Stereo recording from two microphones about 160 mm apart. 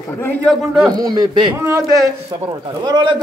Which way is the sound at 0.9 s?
25° right (ahead or behind).